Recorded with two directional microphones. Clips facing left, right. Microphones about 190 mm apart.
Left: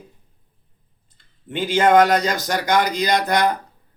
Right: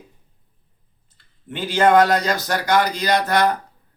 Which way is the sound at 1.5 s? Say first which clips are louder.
Even; 20° left (ahead or behind).